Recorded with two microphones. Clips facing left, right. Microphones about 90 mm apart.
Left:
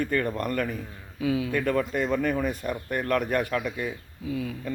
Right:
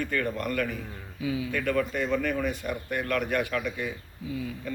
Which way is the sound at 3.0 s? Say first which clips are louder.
Left 3 dB; 35° left (ahead or behind).